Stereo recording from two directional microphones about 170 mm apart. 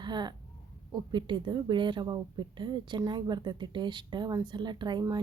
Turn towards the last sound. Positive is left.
turn(degrees=-25)  # may be behind; listen again after turning